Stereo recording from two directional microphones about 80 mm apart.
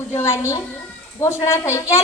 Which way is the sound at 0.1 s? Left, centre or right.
Left.